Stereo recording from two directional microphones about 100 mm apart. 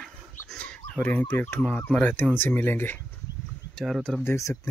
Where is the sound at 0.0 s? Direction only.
5° left (ahead or behind).